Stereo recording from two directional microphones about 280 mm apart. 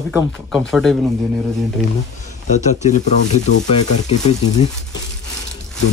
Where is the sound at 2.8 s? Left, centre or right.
Left.